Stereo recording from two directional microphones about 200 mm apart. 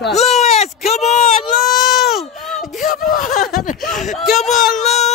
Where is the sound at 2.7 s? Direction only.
40° left (ahead or behind).